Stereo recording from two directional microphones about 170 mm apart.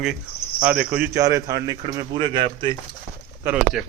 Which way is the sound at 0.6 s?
10° right (ahead or behind).